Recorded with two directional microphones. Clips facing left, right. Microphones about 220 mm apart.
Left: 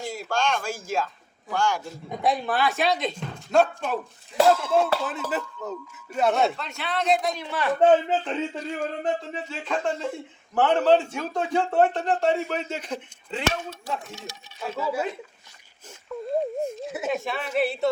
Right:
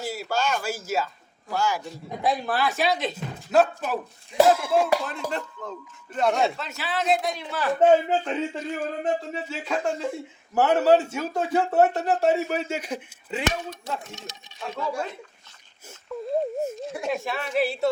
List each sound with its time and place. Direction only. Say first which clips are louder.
0.0 s speech: even; 5° right (ahead or behind)
5.6 s a man's voice: left 3 dB; 10° left (ahead or behind); by 13.7 s 10° right (ahead or behind)
14.1 s speech: left 1 dB; 20° right (ahead or behind)
14.8 s a man's voice: left 2 dB; 5° left (ahead or behind)
16.1 s a man's voice: even; centre (ahead or behind)